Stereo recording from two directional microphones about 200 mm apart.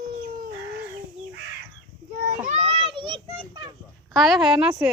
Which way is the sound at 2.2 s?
40° right (ahead or behind).